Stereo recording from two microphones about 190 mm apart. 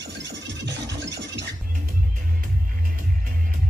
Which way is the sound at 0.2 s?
65° right (ahead or behind).